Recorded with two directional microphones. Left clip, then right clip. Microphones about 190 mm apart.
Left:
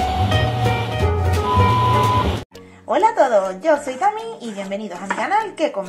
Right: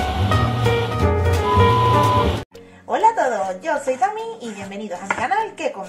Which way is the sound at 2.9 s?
30° left (ahead or behind).